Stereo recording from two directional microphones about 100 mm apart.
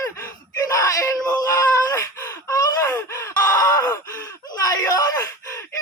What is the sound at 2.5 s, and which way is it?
Gasp, 35° left (ahead or behind).